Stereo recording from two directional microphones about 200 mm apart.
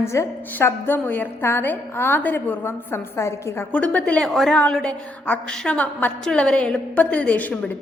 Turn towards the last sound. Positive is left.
turn(degrees=10)  # may be behind; listen again after turning